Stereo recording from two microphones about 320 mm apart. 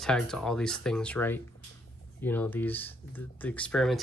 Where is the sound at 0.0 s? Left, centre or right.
Centre.